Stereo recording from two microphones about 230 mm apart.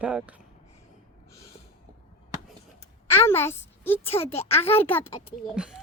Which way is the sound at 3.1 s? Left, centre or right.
Centre.